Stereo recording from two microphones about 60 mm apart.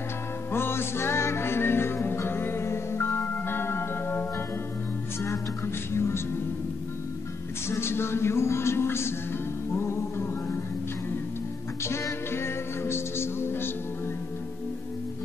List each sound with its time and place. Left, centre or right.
0.5 s music: left
5.9 s music: left
7.6 s speech: left
9.7 s music: left
11.8 s music: left